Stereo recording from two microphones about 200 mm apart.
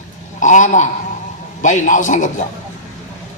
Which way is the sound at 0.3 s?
40° left (ahead or behind).